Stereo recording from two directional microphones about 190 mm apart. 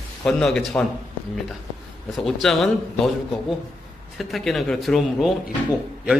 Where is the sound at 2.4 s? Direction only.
Centre (ahead or behind).